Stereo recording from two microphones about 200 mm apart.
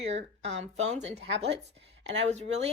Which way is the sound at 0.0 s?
35° right (ahead or behind).